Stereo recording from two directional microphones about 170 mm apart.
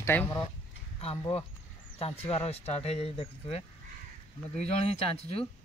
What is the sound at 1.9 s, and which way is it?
Speech, 35° left (ahead or behind).